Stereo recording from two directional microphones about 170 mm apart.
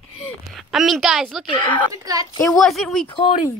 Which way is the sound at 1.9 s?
20° right (ahead or behind).